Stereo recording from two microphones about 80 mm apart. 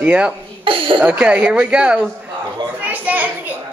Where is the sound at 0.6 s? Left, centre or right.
Right.